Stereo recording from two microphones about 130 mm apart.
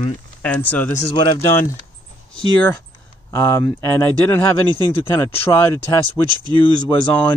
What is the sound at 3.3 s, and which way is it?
Speech, 20° left (ahead or behind).